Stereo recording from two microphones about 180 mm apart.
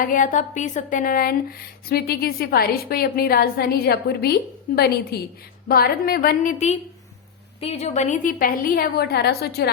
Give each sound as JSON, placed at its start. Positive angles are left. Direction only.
{"t": 0.0, "sound": "speech", "side_deg": 45}
{"t": 7.6, "sound": "a woman's voice", "side_deg": 35}